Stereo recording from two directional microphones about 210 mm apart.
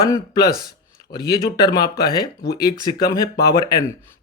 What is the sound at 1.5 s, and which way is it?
Speech, 15° left (ahead or behind).